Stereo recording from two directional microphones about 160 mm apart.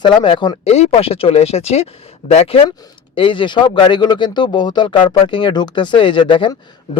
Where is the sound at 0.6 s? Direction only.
40° left (ahead or behind).